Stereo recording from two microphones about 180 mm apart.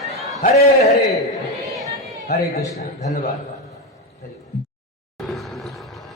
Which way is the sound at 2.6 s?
20° left (ahead or behind).